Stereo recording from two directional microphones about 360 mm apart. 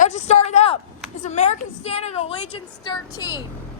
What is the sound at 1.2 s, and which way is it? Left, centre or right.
A woman's voice, centre.